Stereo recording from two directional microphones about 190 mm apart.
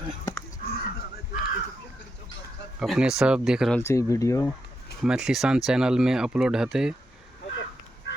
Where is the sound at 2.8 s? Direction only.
Centre (ahead or behind).